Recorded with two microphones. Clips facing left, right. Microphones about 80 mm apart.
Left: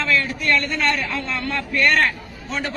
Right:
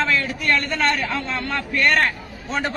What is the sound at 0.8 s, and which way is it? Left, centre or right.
Speech, right.